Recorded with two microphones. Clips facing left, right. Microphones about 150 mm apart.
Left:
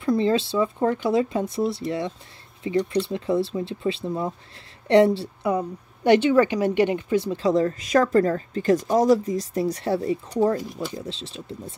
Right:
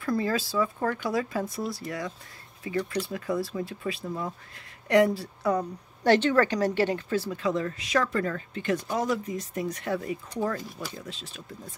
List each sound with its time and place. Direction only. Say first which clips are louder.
0.0 s speech: left 6 dB; 25° left (ahead or behind)
5.5 s a woman's voice: left 2 dB; 10° left (ahead or behind)
7.4 s speech: left 7 dB; 40° left (ahead or behind)